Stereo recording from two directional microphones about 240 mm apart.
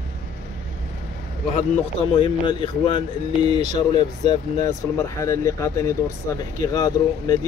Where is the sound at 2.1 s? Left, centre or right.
Left.